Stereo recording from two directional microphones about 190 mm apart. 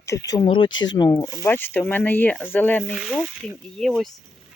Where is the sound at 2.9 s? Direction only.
Centre (ahead or behind).